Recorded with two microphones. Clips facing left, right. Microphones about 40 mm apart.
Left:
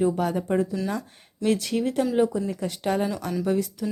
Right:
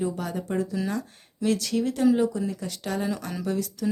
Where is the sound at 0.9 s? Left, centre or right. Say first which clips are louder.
Even; centre.